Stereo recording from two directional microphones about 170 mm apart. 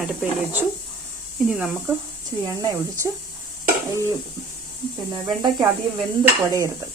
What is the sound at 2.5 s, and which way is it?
Speech, 20° right (ahead or behind).